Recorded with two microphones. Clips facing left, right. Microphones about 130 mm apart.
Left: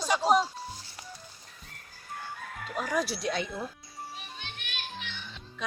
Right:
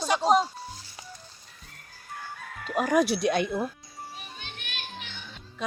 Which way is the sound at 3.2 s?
60° right (ahead or behind).